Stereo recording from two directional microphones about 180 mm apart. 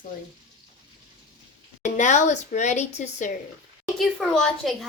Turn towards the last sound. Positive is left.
turn(degrees=0)  # may be behind; listen again after turning